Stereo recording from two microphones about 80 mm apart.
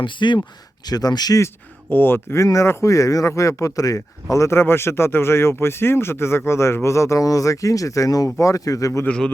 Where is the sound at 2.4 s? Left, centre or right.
Left.